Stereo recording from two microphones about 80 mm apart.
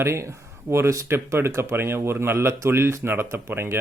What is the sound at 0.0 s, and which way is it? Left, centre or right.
Speech, right.